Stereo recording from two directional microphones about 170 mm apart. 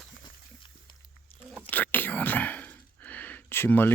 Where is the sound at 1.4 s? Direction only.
5° left (ahead or behind).